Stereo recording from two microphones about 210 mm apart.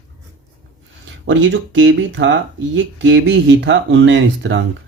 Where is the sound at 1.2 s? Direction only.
65° right (ahead or behind).